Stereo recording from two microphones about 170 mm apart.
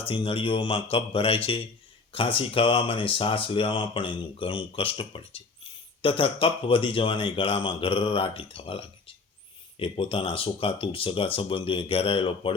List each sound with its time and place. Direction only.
0.1 s speech: 35° left (ahead or behind)